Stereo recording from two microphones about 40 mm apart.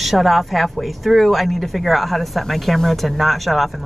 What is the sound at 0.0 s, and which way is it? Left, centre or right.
Speech, centre.